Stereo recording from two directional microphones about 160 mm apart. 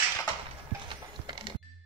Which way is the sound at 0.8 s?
30° right (ahead or behind).